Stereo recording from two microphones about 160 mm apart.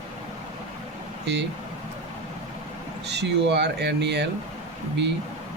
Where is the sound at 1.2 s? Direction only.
90° right.